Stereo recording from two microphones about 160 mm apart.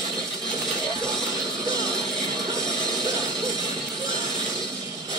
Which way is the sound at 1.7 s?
25° right (ahead or behind).